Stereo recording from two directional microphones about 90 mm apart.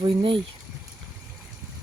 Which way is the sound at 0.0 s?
65° right (ahead or behind).